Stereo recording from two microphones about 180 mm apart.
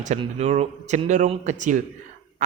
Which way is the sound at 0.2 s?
35° right (ahead or behind).